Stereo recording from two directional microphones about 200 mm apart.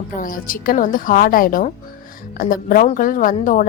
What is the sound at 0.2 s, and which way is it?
A woman's voice, 45° left (ahead or behind).